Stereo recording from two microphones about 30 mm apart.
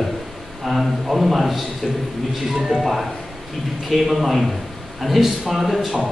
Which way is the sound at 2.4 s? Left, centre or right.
Centre.